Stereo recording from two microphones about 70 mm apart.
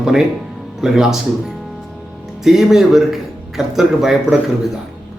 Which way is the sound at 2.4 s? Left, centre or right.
Centre.